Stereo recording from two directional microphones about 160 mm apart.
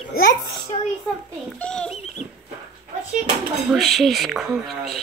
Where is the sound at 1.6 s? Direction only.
5° left (ahead or behind).